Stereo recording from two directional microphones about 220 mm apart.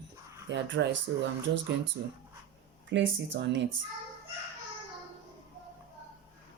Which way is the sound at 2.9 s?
55° right (ahead or behind).